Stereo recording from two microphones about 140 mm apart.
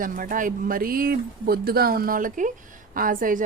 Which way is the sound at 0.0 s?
80° right.